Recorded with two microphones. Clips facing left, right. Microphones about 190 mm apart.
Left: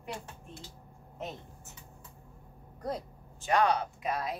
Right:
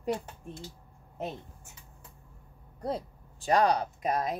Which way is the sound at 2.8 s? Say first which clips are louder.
Right 3 dB; 30° right (ahead or behind).